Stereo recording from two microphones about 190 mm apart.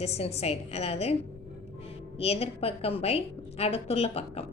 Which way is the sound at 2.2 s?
30° left (ahead or behind).